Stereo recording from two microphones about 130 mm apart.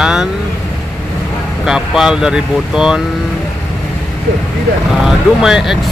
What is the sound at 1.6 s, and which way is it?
Speech, centre (ahead or behind).